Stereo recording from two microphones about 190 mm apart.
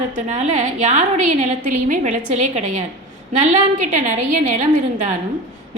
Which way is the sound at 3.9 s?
40° right (ahead or behind).